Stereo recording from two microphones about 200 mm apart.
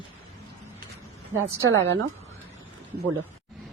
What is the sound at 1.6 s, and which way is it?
Speech, 65° right (ahead or behind).